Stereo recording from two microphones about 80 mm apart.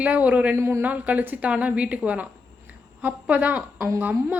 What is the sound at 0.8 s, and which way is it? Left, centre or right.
A woman's voice, centre.